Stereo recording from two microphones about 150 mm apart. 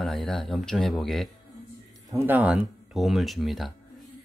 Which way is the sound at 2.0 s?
15° right (ahead or behind).